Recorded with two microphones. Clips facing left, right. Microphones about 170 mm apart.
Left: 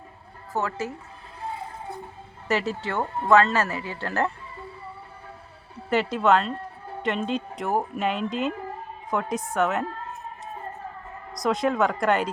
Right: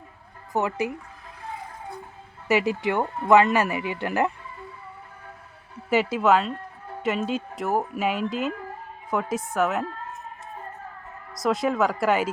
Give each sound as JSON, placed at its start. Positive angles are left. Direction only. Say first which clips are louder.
{"t": 0.5, "sound": "speech", "louder": "right 3 dB", "side_deg": -15}
{"t": 2.5, "sound": "speech", "louder": "right 4 dB", "side_deg": -15}
{"t": 5.9, "sound": "speech", "louder": "right 1 dB", "side_deg": -5}
{"t": 11.3, "sound": "speech", "louder": "even", "side_deg": 0}